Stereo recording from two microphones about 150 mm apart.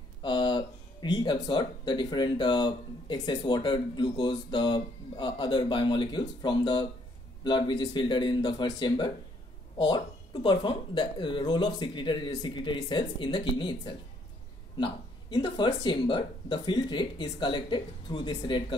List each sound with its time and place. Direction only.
0.2 s speech: 30° left (ahead or behind)